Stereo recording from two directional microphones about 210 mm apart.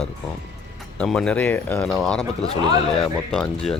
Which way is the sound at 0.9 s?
5° left (ahead or behind).